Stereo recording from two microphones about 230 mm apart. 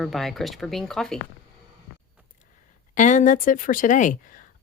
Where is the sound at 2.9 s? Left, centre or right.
Left.